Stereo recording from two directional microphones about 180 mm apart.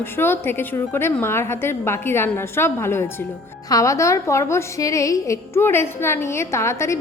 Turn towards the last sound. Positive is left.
turn(degrees=15)  # may be behind; listen again after turning